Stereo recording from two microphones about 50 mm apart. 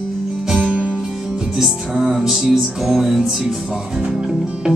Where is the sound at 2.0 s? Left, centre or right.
Centre.